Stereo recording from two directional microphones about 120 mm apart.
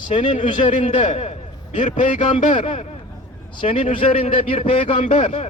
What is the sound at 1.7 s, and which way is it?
Speech, 85° left.